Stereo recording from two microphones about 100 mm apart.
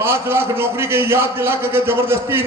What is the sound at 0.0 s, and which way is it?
A man's voice, 25° right (ahead or behind).